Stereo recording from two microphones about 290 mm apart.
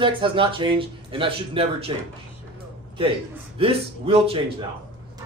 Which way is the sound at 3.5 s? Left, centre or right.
Centre.